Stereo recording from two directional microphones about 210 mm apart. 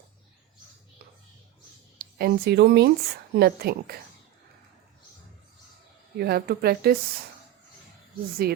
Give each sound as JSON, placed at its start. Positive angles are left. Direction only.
{"t": 2.0, "sound": "speech", "side_deg": -45}
{"t": 6.1, "sound": "speech", "side_deg": -50}
{"t": 8.4, "sound": "speech", "side_deg": -50}